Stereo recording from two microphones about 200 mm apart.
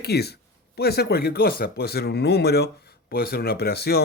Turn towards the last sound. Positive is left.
turn(degrees=50)  # may be behind; listen again after turning